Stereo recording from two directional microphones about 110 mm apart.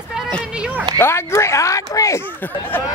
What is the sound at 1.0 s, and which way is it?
Speech, 25° left (ahead or behind).